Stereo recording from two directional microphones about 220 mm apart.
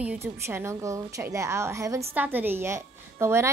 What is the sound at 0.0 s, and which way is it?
A woman's voice, 5° right (ahead or behind).